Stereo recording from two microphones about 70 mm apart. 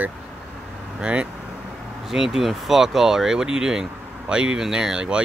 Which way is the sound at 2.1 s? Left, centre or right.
Centre.